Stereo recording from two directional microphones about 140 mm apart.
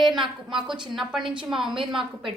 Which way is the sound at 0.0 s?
Centre (ahead or behind).